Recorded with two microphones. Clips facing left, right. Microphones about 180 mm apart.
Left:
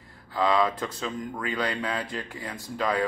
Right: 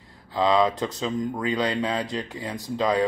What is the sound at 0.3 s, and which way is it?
Speech, 20° right (ahead or behind).